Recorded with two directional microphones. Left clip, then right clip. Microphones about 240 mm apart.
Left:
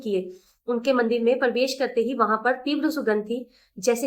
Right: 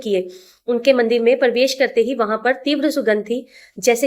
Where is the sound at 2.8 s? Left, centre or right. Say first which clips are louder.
Right 6 dB; right.